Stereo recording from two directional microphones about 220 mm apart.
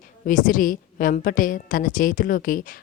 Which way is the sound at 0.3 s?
40° left (ahead or behind).